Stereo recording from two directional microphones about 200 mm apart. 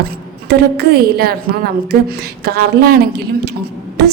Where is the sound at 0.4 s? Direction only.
55° right (ahead or behind).